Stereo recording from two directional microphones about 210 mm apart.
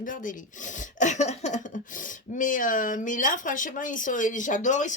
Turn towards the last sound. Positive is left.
turn(degrees=35)  # may be behind; listen again after turning